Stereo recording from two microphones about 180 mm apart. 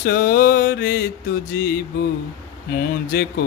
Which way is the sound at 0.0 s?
60° left (ahead or behind).